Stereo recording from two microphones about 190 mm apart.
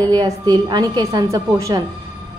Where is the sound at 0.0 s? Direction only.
20° right (ahead or behind).